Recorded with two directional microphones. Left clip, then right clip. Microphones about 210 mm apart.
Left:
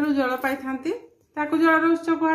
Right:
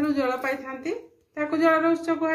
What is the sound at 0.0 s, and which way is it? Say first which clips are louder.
A woman's voice: left 2 dB; 45° left (ahead or behind).